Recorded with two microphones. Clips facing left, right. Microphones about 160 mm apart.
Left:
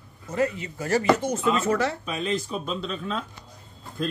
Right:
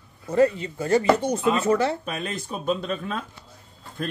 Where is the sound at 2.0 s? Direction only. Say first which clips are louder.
Left 3 dB; 50° right (ahead or behind).